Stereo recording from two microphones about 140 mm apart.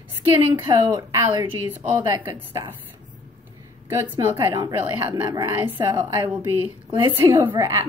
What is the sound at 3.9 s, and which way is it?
A woman's voice, 15° right (ahead or behind).